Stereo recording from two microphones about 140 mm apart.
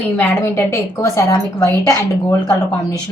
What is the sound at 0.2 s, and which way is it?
A woman's voice, 20° left (ahead or behind).